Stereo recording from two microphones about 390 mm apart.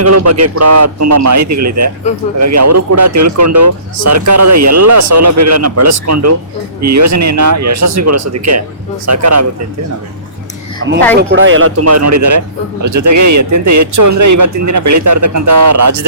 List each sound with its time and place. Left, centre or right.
0.0 s a man's voice: right
10.8 s a man's voice: right